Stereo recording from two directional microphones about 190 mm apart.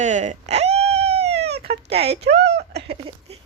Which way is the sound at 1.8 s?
30° right (ahead or behind).